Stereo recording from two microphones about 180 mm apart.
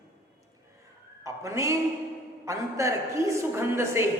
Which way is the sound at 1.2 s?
15° right (ahead or behind).